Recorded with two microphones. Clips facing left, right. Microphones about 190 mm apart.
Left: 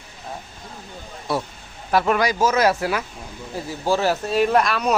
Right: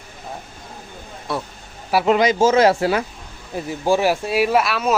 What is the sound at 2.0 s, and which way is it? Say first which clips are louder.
Speech: right 7 dB; 20° right (ahead or behind).